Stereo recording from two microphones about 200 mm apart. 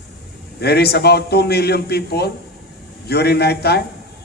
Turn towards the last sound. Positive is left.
turn(degrees=55)  # may be behind; listen again after turning